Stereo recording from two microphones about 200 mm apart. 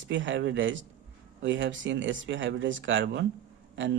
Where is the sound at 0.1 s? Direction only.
65° right (ahead or behind).